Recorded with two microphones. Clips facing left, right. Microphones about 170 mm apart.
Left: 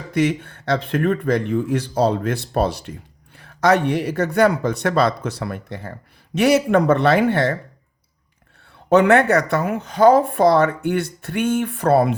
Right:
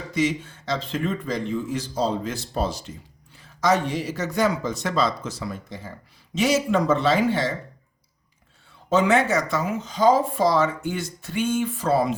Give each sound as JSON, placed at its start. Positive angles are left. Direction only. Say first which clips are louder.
{"t": 0.1, "sound": "speech", "louder": "left 4 dB", "side_deg": 60}
{"t": 8.9, "sound": "speech", "louder": "left 6 dB", "side_deg": 60}